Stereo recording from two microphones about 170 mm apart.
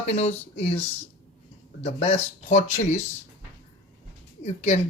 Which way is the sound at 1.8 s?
35° left (ahead or behind).